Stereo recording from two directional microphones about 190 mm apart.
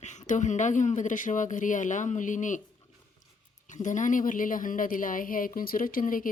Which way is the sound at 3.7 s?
40° left (ahead or behind).